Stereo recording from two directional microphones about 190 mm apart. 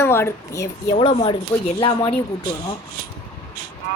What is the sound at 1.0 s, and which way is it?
Speech, 25° left (ahead or behind).